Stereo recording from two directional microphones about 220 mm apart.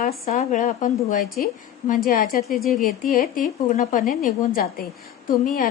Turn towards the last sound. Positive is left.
turn(degrees=40)  # may be behind; listen again after turning